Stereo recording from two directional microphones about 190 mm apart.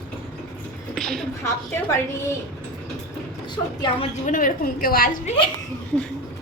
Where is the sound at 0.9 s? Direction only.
5° left (ahead or behind).